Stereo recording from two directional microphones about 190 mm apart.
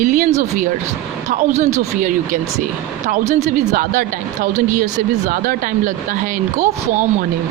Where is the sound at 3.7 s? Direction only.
45° right (ahead or behind).